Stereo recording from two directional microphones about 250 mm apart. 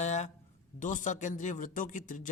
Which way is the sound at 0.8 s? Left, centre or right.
Left.